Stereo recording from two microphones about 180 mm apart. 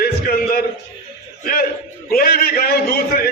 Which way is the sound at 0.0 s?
55° left (ahead or behind).